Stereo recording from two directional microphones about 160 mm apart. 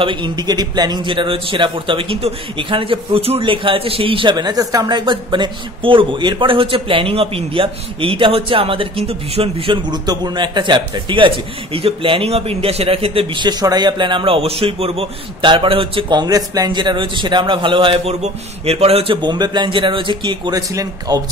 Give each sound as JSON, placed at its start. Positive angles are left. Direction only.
{"t": 0.0, "sound": "a man's voice", "side_deg": -30}